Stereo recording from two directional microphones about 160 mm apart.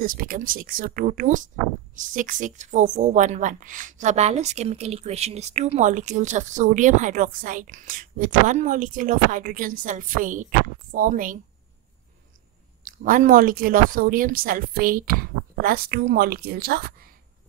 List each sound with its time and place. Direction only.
0.0 s a woman's voice: 60° right (ahead or behind)
12.8 s speech: 60° right (ahead or behind)